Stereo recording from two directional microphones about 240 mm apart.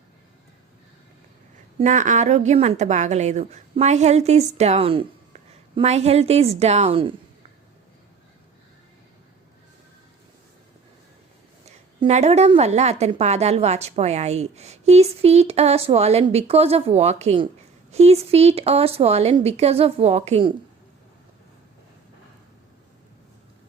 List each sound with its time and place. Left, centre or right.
1.8 s a woman's voice: right
11.9 s a woman's voice: right